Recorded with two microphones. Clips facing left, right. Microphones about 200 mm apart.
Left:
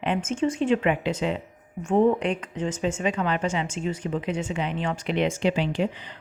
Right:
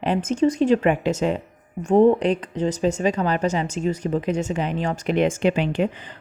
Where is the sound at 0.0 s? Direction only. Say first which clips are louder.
Right 5 dB; 35° right (ahead or behind); by 5.9 s 55° right (ahead or behind).